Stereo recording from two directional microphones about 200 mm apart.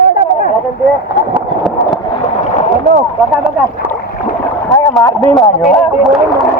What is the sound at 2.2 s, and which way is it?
Rowboat, 35° left (ahead or behind).